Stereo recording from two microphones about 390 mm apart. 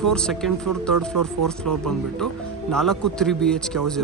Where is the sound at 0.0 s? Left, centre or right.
Centre.